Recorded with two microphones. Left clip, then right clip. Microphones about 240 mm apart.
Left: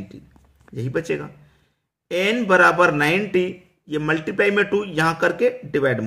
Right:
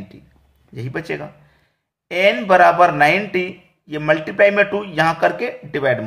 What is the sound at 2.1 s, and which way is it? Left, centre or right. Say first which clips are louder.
A man's voice: right 4 dB; centre.